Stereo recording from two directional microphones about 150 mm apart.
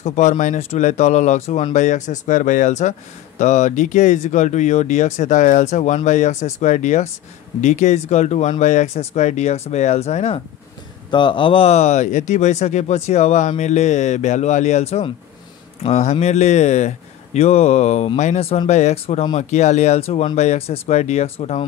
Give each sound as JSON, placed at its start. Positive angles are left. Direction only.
{"t": 0.0, "sound": "speech", "side_deg": 50}
{"t": 11.1, "sound": "speech", "side_deg": 30}